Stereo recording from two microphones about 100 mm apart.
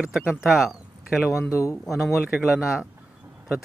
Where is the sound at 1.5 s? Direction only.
30° left (ahead or behind).